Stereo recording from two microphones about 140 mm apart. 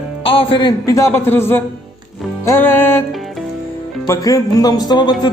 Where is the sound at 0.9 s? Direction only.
20° left (ahead or behind).